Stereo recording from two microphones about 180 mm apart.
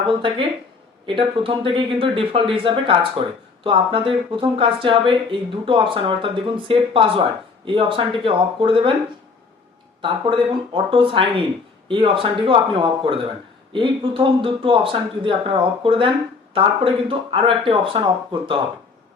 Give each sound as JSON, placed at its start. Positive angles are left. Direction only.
{"t": 0.1, "sound": "speech", "side_deg": -30}
{"t": 10.0, "sound": "speech", "side_deg": -30}